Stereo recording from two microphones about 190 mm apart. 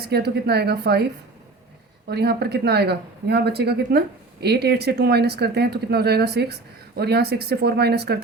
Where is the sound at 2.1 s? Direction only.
55° right (ahead or behind).